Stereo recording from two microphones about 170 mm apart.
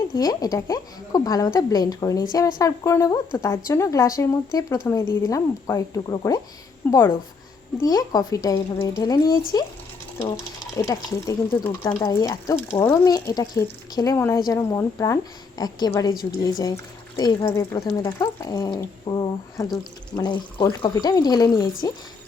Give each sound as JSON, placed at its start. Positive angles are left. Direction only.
{"t": 0.2, "sound": "speech", "side_deg": 20}
{"t": 10.8, "sound": "speech", "side_deg": 20}